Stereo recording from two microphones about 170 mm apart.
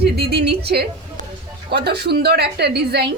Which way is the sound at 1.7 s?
70° right (ahead or behind).